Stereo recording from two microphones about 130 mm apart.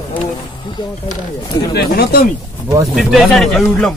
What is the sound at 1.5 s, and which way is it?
Speech, 30° left (ahead or behind).